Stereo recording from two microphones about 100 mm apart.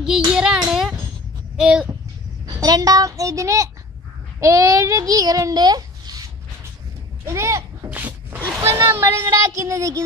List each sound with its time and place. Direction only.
0.3 s child singing: 5° right (ahead or behind)
1.6 s a child's voice: 5° right (ahead or behind)
2.4 s a child's voice: 40° right (ahead or behind)
7.2 s a child's voice: 30° right (ahead or behind)
7.9 s zipper: 15° right (ahead or behind)
8.5 s speech: 25° right (ahead or behind)